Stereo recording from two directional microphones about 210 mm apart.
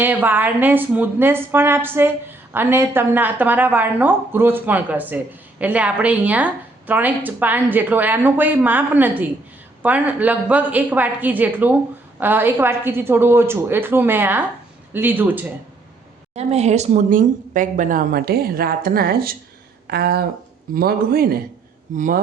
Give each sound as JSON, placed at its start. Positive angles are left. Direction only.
{"t": 0.0, "sound": "a woman's voice", "side_deg": -10}
{"t": 16.3, "sound": "speech", "side_deg": -30}